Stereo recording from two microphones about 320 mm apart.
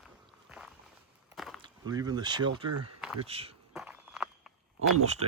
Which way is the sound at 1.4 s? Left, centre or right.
Centre.